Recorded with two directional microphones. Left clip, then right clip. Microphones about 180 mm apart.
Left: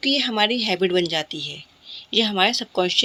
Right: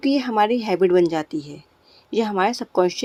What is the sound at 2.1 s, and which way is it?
Speech, 25° right (ahead or behind).